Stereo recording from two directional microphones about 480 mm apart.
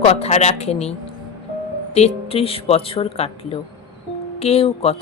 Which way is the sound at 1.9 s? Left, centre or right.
Centre.